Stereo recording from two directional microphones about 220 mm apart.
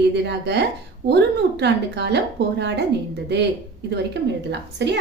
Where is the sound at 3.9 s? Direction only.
50° right (ahead or behind).